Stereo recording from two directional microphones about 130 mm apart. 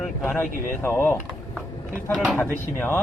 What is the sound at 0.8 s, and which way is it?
Speech, 15° left (ahead or behind).